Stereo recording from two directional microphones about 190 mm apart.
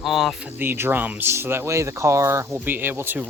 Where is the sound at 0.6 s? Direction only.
10° right (ahead or behind).